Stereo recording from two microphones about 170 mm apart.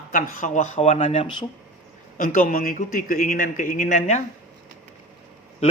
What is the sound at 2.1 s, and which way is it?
A man's voice, 50° left (ahead or behind).